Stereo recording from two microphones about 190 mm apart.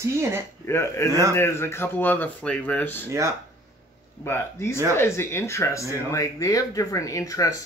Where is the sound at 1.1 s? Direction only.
15° right (ahead or behind).